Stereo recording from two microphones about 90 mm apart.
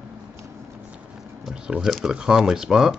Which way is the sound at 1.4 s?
5° right (ahead or behind).